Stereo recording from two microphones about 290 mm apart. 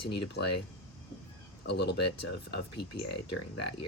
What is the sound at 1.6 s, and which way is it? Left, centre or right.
Speech, left.